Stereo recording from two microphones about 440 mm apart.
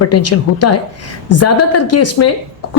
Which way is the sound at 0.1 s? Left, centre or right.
Left.